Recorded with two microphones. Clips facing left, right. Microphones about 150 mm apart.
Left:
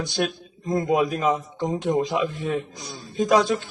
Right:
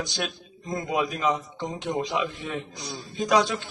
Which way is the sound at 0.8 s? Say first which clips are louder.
Left 6 dB; 45° left (ahead or behind).